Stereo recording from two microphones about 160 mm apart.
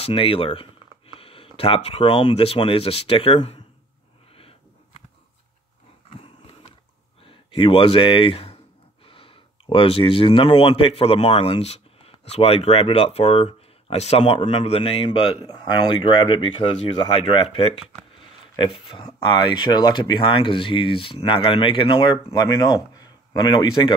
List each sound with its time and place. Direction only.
0.0 s speech: 35° left (ahead or behind)
4.4 s sniff: 35° left (ahead or behind)
7.2 s speech: 35° left (ahead or behind)